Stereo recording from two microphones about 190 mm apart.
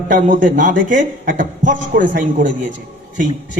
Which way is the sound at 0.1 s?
45° right (ahead or behind).